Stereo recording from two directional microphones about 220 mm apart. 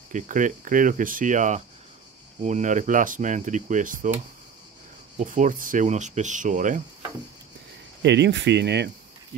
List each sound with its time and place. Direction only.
0.1 s speech: 35° right (ahead or behind)
5.2 s speech: 35° right (ahead or behind)
8.0 s speech: 50° right (ahead or behind)